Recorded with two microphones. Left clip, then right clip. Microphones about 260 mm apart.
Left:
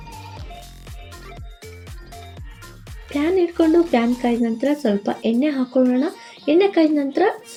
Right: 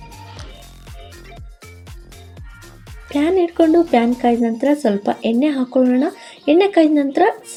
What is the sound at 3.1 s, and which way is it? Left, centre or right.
Speech, right.